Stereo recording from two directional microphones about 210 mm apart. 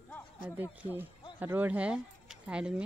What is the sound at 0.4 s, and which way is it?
Speech, 10° right (ahead or behind).